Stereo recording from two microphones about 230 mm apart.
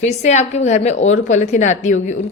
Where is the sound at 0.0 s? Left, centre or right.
Left.